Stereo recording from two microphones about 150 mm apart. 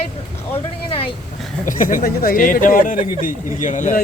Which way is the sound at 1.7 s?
60° left (ahead or behind).